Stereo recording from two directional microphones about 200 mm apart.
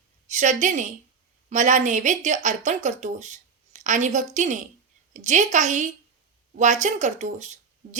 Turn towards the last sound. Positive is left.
turn(degrees=-35)  # may be behind; listen again after turning